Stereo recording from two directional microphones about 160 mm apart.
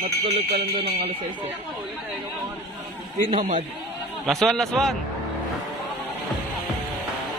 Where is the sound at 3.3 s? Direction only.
50° right (ahead or behind).